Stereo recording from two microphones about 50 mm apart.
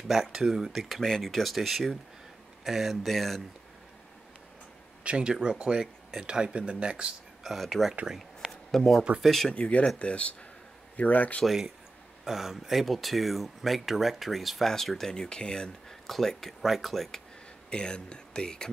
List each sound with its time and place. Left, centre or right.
0.1 s speech: centre
1.0 s speech: centre
5.0 s speech: right
7.4 s speech: centre
8.5 s shuffling cards: centre
9.2 s speech: centre
9.5 s speech: left
11.4 s speech: centre
16.1 s speech: centre
17.6 s speech: centre